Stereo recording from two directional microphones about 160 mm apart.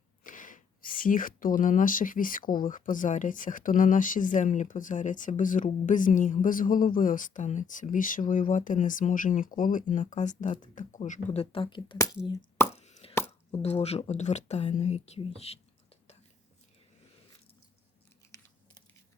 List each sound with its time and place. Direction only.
0.3 s speech: 55° left (ahead or behind); by 12.5 s 30° left (ahead or behind)
12.7 s plop: 45° left (ahead or behind)
13.6 s speech: 40° left (ahead or behind)
18.3 s biting: 20° left (ahead or behind)